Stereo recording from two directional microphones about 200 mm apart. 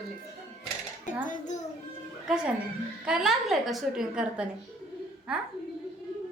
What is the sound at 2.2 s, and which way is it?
A woman's voice, 5° right (ahead or behind).